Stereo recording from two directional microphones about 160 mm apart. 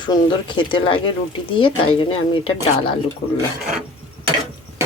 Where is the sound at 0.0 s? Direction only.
30° left (ahead or behind).